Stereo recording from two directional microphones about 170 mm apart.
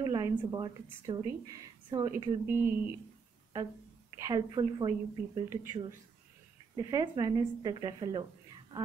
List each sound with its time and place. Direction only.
0.0 s a woman's voice: 25° right (ahead or behind)
4.2 s speech: 25° right (ahead or behind)